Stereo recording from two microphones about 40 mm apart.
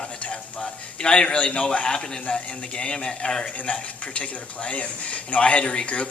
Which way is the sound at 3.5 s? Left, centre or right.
Left.